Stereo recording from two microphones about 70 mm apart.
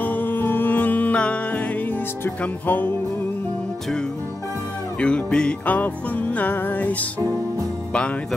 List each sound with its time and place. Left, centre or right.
0.0 s music: left
5.0 s music: centre